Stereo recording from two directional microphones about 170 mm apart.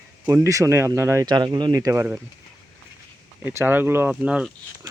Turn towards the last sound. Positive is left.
turn(degrees=-5)  # may be behind; listen again after turning